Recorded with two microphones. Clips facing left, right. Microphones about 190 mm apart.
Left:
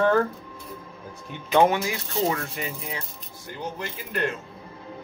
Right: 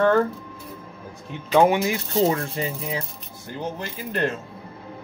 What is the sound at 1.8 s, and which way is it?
Speech, 25° right (ahead or behind).